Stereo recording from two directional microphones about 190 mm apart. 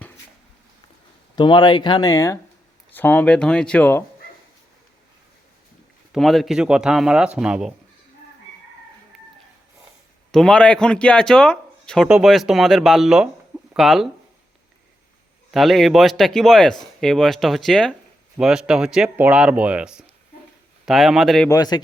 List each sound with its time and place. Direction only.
1.4 s speech: 25° left (ahead or behind); by 4.0 s 10° left (ahead or behind)
6.1 s speech: centre (ahead or behind)
9.1 s chicken: centre (ahead or behind)
10.3 s speech: 5° left (ahead or behind)
15.5 s speech: centre (ahead or behind)
21.5 s speech: 20° left (ahead or behind)